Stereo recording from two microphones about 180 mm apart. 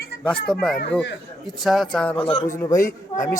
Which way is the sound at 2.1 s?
30° left (ahead or behind).